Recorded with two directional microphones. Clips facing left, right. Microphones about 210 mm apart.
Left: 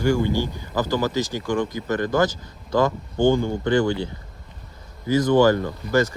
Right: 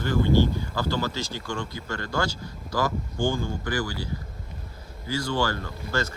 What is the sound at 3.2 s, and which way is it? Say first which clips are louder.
Speech: left 8 dB; 60° left (ahead or behind).